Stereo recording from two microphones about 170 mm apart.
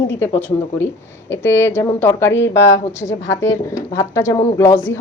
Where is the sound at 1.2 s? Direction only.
15° left (ahead or behind).